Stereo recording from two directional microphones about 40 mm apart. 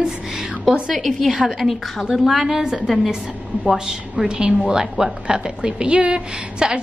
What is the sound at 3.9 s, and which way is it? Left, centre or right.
A woman's voice, centre.